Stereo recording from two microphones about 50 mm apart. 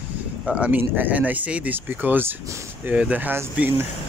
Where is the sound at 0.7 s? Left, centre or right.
Right.